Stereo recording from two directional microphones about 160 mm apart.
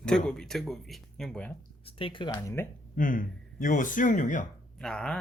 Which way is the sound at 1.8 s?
30° left (ahead or behind).